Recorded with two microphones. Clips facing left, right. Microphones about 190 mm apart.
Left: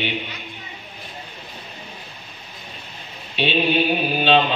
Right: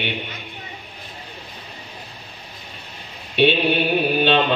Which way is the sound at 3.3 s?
60° right (ahead or behind).